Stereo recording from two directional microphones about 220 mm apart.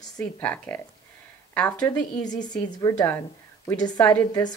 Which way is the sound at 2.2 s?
20° left (ahead or behind).